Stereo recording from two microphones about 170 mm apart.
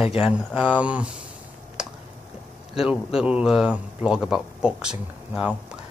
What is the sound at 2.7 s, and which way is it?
A man's voice, 5° right (ahead or behind).